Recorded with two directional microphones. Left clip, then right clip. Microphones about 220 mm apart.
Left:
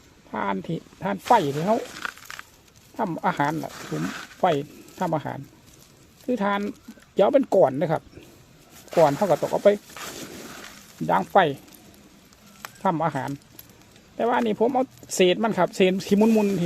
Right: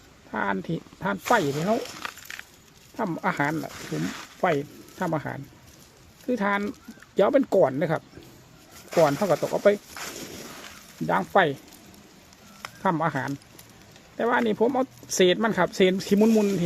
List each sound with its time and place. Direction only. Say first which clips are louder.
0.3 s speech: even; 10° left (ahead or behind)
11.0 s speech: left 2 dB; 15° left (ahead or behind)
12.8 s speech: left 1 dB; 10° left (ahead or behind)